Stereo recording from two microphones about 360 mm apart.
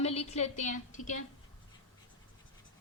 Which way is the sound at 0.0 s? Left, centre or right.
Centre.